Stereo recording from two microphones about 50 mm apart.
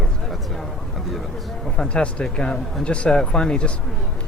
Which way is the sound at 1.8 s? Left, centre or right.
Centre.